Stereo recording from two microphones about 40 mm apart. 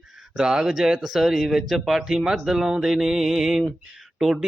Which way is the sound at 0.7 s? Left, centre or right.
Centre.